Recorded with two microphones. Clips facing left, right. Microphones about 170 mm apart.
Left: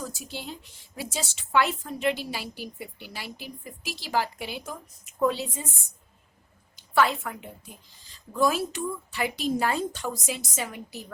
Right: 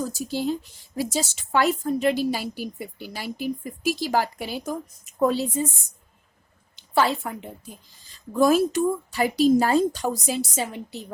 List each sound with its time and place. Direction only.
0.0 s a woman's voice: 40° right (ahead or behind)
6.7 s a woman's voice: 30° right (ahead or behind)
8.3 s a woman's voice: 45° right (ahead or behind); by 11.0 s 25° right (ahead or behind)